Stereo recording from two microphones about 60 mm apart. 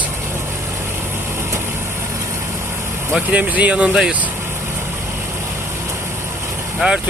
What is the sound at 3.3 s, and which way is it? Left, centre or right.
Speech, right.